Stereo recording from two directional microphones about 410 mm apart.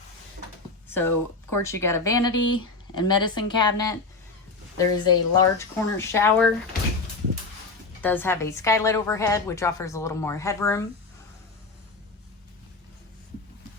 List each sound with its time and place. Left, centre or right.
0.9 s a woman's voice: centre
2.3 s speech: left
3.2 s a woman's voice: centre
8.0 s a woman's voice: centre